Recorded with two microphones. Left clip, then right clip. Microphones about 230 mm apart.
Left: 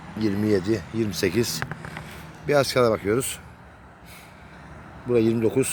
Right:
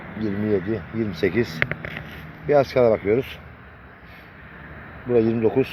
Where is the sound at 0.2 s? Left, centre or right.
Left.